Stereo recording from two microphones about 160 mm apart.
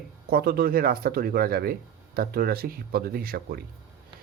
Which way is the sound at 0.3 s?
75° right (ahead or behind).